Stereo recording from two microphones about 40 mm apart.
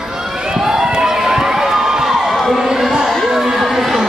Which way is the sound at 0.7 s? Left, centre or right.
Centre.